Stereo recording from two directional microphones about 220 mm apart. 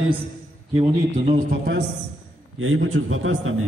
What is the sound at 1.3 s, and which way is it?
Speech, 50° right (ahead or behind).